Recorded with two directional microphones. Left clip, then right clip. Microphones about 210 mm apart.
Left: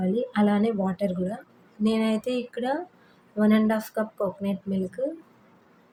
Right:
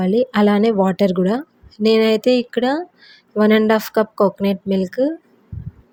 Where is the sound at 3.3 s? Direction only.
40° right (ahead or behind).